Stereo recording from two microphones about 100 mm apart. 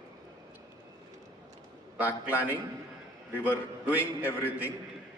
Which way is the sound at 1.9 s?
15° right (ahead or behind).